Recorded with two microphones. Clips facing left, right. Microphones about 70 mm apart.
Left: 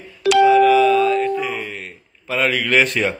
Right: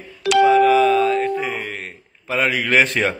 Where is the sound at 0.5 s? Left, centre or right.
Right.